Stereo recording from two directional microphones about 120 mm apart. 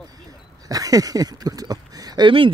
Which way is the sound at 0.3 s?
30° right (ahead or behind).